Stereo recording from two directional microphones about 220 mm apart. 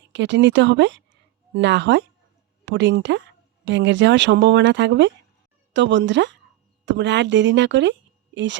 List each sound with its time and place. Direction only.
0.1 s speech: 55° right (ahead or behind)